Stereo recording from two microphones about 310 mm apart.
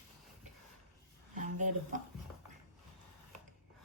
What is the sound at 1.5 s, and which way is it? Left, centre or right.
Speech, right.